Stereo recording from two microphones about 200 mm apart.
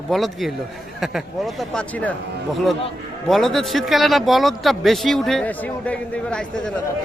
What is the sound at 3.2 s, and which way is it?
Speech, centre (ahead or behind).